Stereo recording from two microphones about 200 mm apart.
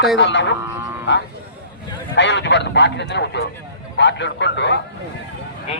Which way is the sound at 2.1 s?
60° left (ahead or behind).